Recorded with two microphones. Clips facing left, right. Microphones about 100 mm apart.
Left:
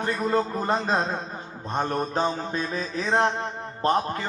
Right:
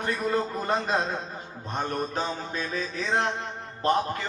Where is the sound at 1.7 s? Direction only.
35° left (ahead or behind).